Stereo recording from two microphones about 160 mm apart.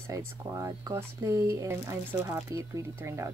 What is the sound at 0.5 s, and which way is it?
Speech, 20° right (ahead or behind).